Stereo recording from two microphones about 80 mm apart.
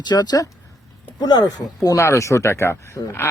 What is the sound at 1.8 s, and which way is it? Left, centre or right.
Speech, left.